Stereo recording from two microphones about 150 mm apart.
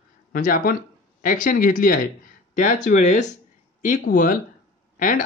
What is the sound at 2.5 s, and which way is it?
Speech, 60° left (ahead or behind).